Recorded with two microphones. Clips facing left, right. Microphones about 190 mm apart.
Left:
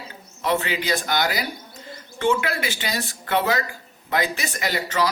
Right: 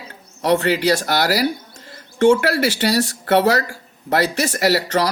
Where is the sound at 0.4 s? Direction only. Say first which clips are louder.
Right 7 dB; 70° right (ahead or behind).